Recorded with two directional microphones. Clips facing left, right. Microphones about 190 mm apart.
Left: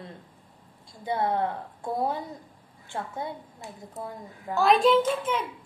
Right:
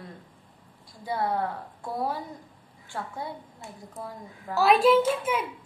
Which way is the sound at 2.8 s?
20° left (ahead or behind).